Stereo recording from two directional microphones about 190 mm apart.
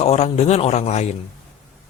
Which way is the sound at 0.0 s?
35° left (ahead or behind).